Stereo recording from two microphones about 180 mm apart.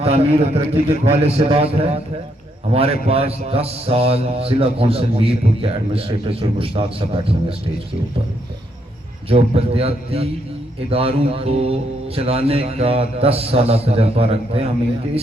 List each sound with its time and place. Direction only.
0.0 s a man's voice: 35° right (ahead or behind)
9.3 s a man's voice: 35° right (ahead or behind)